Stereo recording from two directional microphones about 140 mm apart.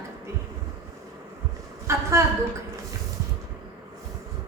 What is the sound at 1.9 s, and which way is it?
Speech, 20° right (ahead or behind).